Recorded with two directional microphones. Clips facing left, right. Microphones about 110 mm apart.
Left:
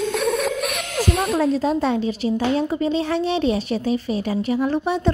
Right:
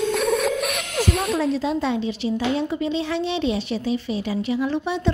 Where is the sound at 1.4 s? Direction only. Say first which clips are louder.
Left 3 dB; 45° left (ahead or behind).